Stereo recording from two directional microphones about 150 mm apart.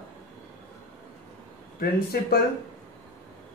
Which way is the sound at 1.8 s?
85° left.